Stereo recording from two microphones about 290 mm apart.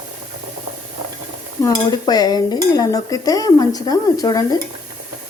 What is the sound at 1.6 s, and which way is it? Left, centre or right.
Stir, centre.